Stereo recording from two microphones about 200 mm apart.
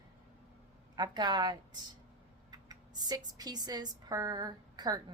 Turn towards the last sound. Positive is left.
turn(degrees=-20)  # may be behind; listen again after turning